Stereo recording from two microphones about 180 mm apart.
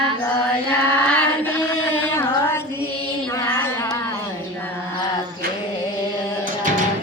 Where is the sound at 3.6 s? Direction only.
15° left (ahead or behind).